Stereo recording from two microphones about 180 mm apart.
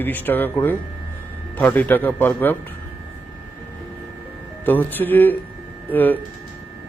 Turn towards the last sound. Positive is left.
turn(degrees=10)  # may be behind; listen again after turning